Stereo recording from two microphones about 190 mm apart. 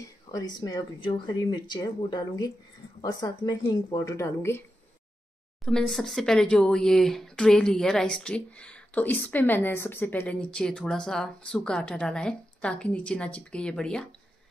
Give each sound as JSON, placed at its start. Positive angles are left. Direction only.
{"t": 0.3, "sound": "speech", "side_deg": 20}
{"t": 5.7, "sound": "speech", "side_deg": 5}